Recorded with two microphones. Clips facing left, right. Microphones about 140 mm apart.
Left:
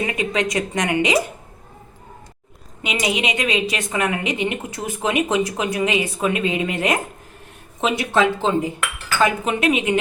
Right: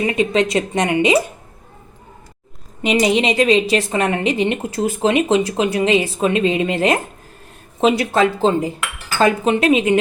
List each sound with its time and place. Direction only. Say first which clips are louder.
0.1 s speech: right 5 dB; 25° right (ahead or behind)
2.8 s a woman's voice: right 7 dB; 35° right (ahead or behind)